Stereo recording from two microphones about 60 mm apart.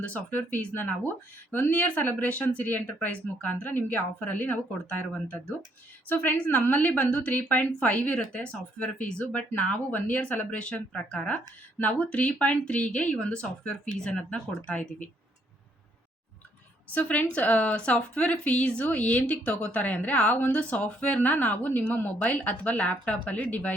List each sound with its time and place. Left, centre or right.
0.0 s a woman's voice: left
6.4 s a woman's voice: left
16.9 s a woman's voice: left